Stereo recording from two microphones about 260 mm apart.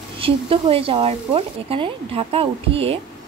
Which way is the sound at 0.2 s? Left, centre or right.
Right.